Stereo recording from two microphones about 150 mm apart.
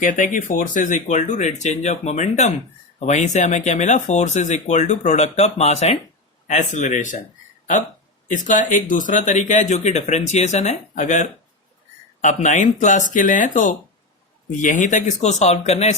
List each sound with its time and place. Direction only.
0.0 s speech: 60° left (ahead or behind)
8.3 s speech: 60° left (ahead or behind)